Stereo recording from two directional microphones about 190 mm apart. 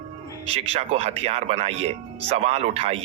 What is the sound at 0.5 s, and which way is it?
Speech, 35° right (ahead or behind).